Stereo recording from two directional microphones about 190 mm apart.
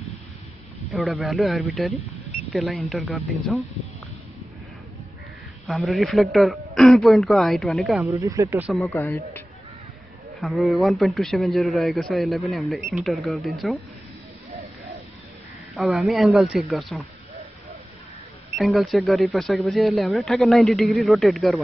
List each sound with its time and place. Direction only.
0.9 s a man's voice: centre (ahead or behind)
5.7 s a man's voice: centre (ahead or behind)
8.2 s speech: 15° right (ahead or behind)
8.8 s a man's voice: 15° left (ahead or behind)
10.4 s a man's voice: centre (ahead or behind)
15.7 s a man's voice: centre (ahead or behind)
18.6 s a man's voice: centre (ahead or behind)